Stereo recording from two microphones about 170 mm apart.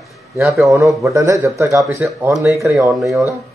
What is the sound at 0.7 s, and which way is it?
Speech, 20° right (ahead or behind).